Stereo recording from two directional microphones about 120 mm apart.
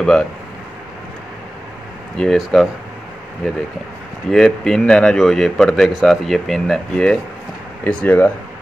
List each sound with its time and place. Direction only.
0.0 s a man's voice: 5° left (ahead or behind)
2.1 s a man's voice: 5° left (ahead or behind)
4.3 s a man's voice: 5° left (ahead or behind)